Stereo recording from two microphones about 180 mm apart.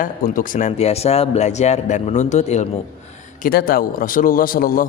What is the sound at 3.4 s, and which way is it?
A man's voice, 55° left (ahead or behind).